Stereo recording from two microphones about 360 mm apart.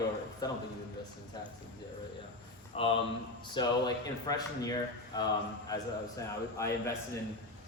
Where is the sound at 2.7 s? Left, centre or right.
Centre.